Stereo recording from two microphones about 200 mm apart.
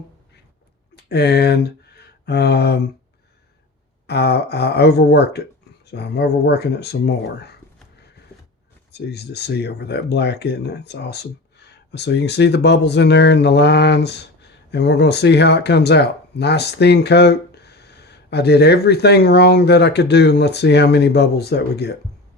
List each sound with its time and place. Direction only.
0.9 s speech: 55° left (ahead or behind)
4.0 s speech: 55° left (ahead or behind)